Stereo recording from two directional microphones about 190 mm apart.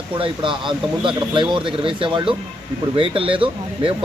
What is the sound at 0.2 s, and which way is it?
Speech, 25° right (ahead or behind).